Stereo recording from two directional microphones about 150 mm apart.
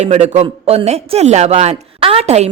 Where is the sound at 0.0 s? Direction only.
50° right (ahead or behind).